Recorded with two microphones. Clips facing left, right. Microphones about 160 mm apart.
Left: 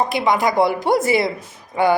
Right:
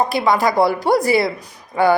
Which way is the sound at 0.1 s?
20° left (ahead or behind).